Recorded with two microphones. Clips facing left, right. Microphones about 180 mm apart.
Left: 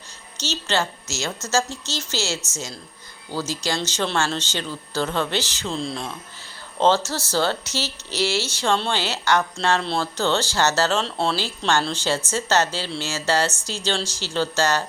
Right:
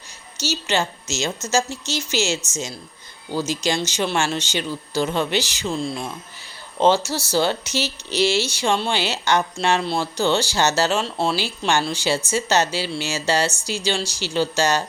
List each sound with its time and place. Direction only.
0.3 s speech: 10° right (ahead or behind)
11.0 s speech: 5° right (ahead or behind)
11.3 s speech: 15° right (ahead or behind)